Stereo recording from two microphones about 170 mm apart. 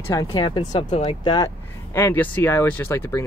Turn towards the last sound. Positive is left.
turn(degrees=15)  # may be behind; listen again after turning